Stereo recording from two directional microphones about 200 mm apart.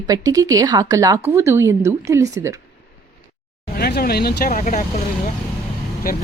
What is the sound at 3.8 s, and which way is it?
Speech, 50° left (ahead or behind).